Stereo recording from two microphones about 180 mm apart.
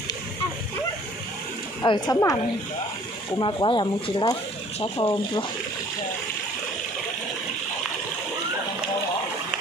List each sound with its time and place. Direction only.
1.8 s speech: 20° left (ahead or behind)